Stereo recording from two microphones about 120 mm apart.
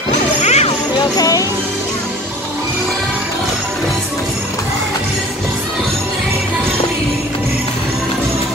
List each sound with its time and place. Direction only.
0.4 s music: 65° left (ahead or behind)
0.9 s music: 30° left (ahead or behind)